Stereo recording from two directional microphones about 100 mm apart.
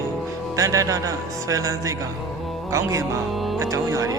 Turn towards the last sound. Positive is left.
turn(degrees=-35)  # may be behind; listen again after turning